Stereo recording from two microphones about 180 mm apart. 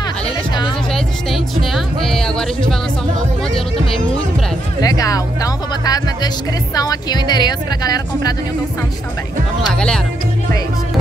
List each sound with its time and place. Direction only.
0.9 s speech: centre (ahead or behind)
4.8 s speech: 20° left (ahead or behind)
9.8 s speech: 5° left (ahead or behind)